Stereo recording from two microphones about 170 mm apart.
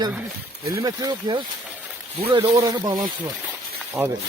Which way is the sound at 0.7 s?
20° right (ahead or behind).